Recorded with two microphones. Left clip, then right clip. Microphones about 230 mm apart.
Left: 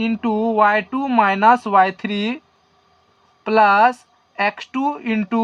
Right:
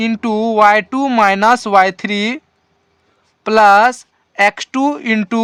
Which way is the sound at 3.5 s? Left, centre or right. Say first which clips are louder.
Right 5 dB; right.